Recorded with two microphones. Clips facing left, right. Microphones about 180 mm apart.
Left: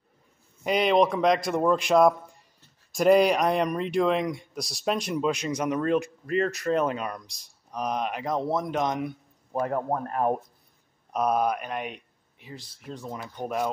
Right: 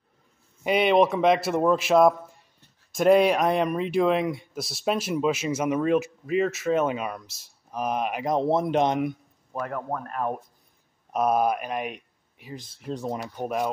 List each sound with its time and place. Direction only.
0.7 s speech: 5° right (ahead or behind)
8.4 s speech: 25° right (ahead or behind)
9.5 s speech: 25° left (ahead or behind)
11.1 s speech: 5° right (ahead or behind)
12.8 s speech: 35° right (ahead or behind)
13.4 s speech: 5° right (ahead or behind)